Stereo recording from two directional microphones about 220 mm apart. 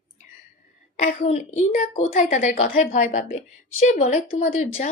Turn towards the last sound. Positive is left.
turn(degrees=35)  # may be behind; listen again after turning